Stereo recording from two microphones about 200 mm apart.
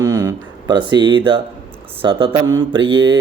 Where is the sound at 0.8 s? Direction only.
25° right (ahead or behind).